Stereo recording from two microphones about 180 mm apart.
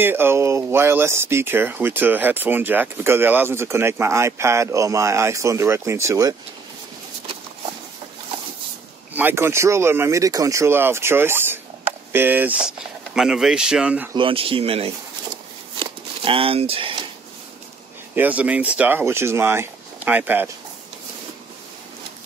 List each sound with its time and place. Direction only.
0.0 s speech: 10° right (ahead or behind)
9.1 s speech: 10° right (ahead or behind)
14.1 s speech: 30° right (ahead or behind)
15.8 s a sound: 30° right (ahead or behind)
18.1 s speech: 10° right (ahead or behind)